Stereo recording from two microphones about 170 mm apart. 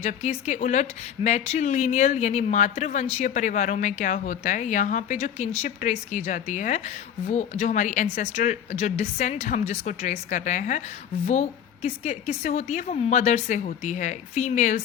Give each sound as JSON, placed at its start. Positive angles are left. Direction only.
{"t": 0.0, "sound": "speech", "side_deg": 40}